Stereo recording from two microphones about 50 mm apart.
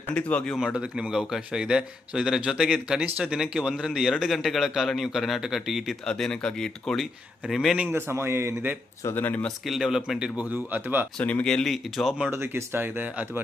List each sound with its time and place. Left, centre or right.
0.1 s speech: left
0.6 s speech: centre
4.1 s speech: centre
4.4 s a man's voice: centre
6.1 s speech: centre
7.0 s a man's voice: centre
7.9 s a man's voice: right
9.1 s speech: left
9.6 s speech: centre
10.5 s speech: right
11.2 s speech: left
11.4 s speech: centre
12.3 s speech: right